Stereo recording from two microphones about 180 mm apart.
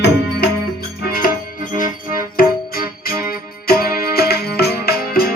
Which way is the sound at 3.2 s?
55° left (ahead or behind).